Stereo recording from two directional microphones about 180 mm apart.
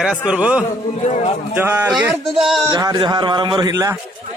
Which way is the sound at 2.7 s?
25° right (ahead or behind).